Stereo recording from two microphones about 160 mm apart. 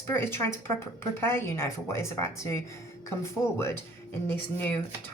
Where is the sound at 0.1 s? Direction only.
15° left (ahead or behind).